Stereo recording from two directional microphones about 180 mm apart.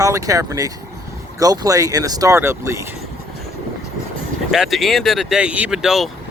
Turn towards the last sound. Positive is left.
turn(degrees=0)  # may be behind; listen again after turning